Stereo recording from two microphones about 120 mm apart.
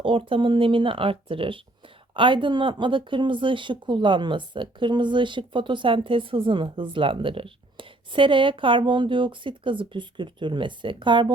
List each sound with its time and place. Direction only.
0.0 s speech: 45° right (ahead or behind)